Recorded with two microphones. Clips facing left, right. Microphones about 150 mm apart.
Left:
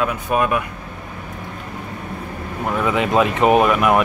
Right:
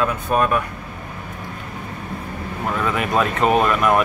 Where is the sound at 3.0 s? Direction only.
15° left (ahead or behind).